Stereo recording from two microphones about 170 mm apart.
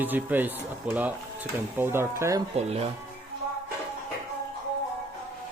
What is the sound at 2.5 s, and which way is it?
Speech, 35° right (ahead or behind).